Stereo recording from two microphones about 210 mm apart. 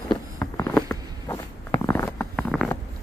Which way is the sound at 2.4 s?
Centre (ahead or behind).